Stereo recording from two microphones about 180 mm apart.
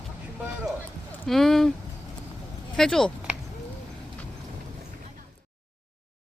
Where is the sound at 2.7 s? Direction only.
5° left (ahead or behind).